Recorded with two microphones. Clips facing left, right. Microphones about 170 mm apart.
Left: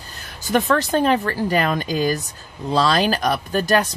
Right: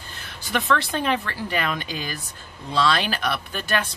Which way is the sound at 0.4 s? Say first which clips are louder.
Left 5 dB; 45° left (ahead or behind).